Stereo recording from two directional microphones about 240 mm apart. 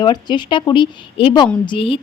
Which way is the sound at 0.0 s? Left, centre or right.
Centre.